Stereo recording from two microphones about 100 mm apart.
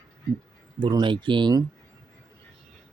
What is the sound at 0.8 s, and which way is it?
Speech, 50° right (ahead or behind).